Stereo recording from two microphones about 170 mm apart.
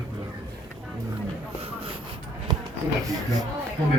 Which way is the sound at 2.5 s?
25° right (ahead or behind).